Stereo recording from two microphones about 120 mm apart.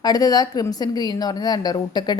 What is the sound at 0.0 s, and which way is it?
A woman's voice, 35° left (ahead or behind).